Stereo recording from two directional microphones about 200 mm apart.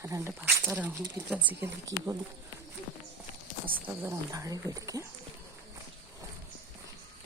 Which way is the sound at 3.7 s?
10° right (ahead or behind).